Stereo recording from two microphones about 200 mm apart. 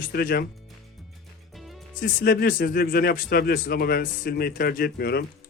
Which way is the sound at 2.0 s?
45° left (ahead or behind).